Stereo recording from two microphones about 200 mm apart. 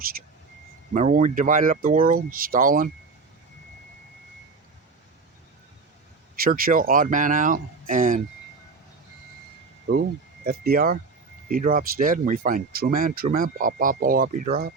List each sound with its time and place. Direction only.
0.9 s speech: 40° right (ahead or behind)
6.4 s speech: 45° right (ahead or behind)
10.4 s speech: 50° right (ahead or behind)